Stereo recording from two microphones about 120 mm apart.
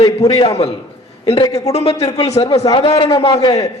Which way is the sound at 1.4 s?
30° left (ahead or behind).